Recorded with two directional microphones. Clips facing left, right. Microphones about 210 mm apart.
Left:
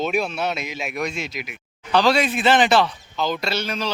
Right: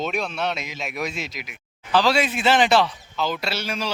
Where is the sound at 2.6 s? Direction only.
50° left (ahead or behind).